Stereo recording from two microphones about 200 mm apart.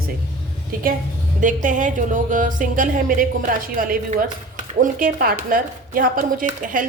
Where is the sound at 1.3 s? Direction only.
40° right (ahead or behind).